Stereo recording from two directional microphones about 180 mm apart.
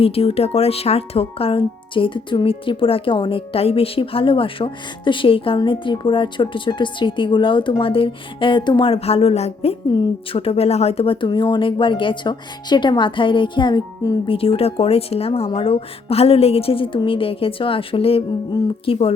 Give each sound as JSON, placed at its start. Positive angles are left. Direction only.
{"t": 0.0, "sound": "speech", "side_deg": 30}
{"t": 14.3, "sound": "speech", "side_deg": 30}